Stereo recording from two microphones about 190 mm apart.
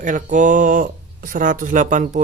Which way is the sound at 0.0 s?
40° right (ahead or behind).